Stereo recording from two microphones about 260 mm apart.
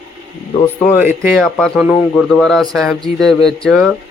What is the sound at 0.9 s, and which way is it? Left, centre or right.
A man's voice, centre.